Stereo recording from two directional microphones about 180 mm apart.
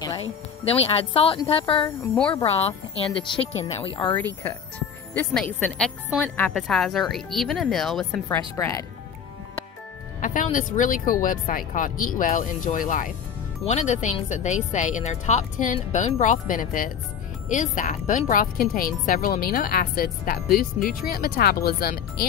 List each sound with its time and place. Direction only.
0.7 s speech: 35° left (ahead or behind)
3.8 s speech: 25° left (ahead or behind)
4.4 s speech: 10° left (ahead or behind)
5.7 s a woman's voice: 5° right (ahead or behind)
6.2 s speech: 10° left (ahead or behind)
10.2 s a woman's voice: 45° left (ahead or behind)